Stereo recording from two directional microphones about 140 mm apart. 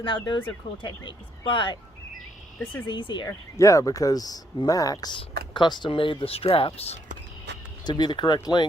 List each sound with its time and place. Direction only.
0.0 s speech: 35° left (ahead or behind)
2.8 s speech: 35° left (ahead or behind)
3.2 s speech: 20° left (ahead or behind); by 7.0 s 45° left (ahead or behind)
7.9 s speech: 30° left (ahead or behind)